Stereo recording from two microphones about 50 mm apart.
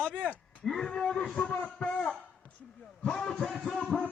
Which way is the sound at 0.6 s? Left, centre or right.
Centre.